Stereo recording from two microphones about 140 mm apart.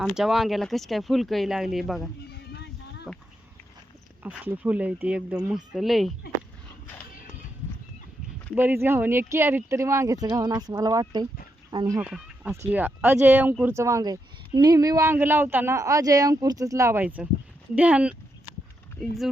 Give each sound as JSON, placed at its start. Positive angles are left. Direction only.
{"t": 0.0, "sound": "speech", "side_deg": -5}
{"t": 4.2, "sound": "speech", "side_deg": -15}
{"t": 8.5, "sound": "speech", "side_deg": -15}
{"t": 11.9, "sound": "speech", "side_deg": -10}